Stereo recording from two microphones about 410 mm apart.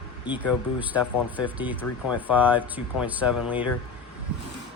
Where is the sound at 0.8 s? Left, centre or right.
Centre.